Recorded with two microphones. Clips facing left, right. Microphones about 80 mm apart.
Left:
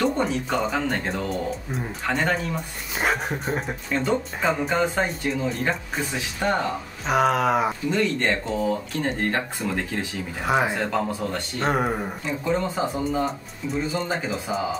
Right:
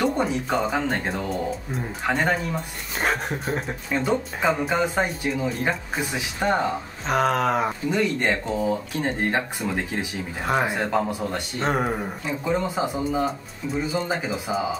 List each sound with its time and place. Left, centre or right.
0.0 s speech: centre
3.9 s speech: centre
7.1 s speech: centre
7.9 s speech: centre
10.4 s speech: centre
10.7 s speech: centre
11.6 s speech: centre
12.4 s speech: centre